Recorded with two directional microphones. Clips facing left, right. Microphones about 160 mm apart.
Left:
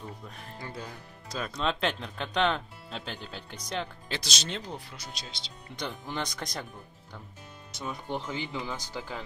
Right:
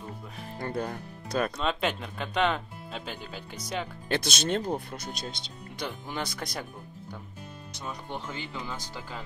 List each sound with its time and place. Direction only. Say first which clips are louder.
0.6 s speech: right 9 dB; 55° right (ahead or behind)
1.6 s speech: right 1 dB; 5° right (ahead or behind)
4.1 s speech: right 11 dB; 55° right (ahead or behind)
5.8 s speech: even; 5° right (ahead or behind)
7.7 s speech: left 3 dB; 5° left (ahead or behind)